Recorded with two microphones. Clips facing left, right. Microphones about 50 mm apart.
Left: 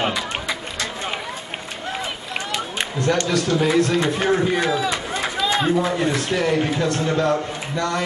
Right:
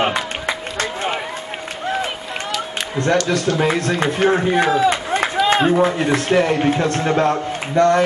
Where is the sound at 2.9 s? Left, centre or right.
Right.